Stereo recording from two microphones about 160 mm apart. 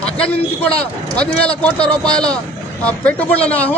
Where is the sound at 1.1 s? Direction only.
5° left (ahead or behind).